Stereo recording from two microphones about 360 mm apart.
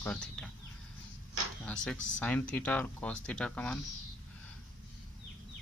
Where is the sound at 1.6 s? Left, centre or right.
Centre.